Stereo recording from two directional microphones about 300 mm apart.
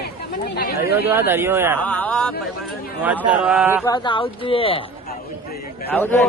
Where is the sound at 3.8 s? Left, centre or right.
Centre.